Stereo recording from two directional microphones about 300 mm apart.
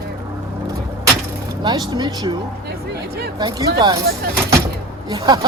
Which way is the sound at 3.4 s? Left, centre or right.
Centre.